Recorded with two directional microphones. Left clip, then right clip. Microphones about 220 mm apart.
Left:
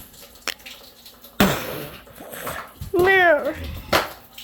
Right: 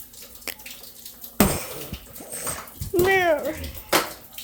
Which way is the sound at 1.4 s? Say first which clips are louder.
Left 3 dB; centre (ahead or behind).